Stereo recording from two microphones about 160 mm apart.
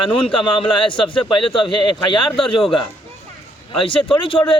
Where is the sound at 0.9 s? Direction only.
30° left (ahead or behind).